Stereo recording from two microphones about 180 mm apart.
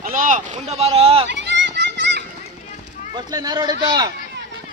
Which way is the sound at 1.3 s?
75° right (ahead or behind).